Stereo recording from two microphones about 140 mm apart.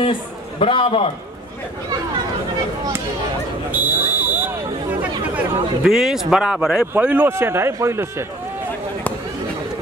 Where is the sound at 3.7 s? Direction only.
15° right (ahead or behind).